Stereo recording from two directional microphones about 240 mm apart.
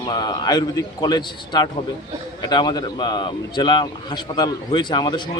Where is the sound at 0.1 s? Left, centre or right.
Centre.